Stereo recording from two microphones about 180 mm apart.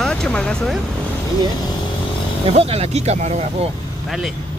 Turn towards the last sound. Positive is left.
turn(degrees=0)  # may be behind; listen again after turning